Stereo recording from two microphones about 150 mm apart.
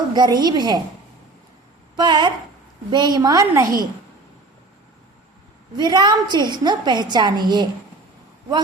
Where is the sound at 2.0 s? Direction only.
30° right (ahead or behind).